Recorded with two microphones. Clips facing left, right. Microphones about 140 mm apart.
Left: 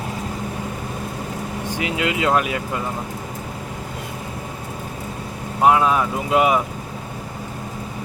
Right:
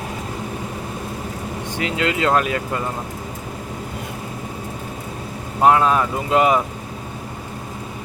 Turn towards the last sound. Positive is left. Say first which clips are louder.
# right 1 dB
turn(degrees=10)  # may be behind; listen again after turning